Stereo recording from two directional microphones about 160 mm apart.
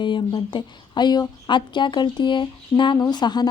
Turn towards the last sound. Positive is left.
turn(degrees=25)  # may be behind; listen again after turning